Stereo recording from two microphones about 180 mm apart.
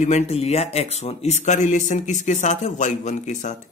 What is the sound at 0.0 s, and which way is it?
Speech, 40° left (ahead or behind).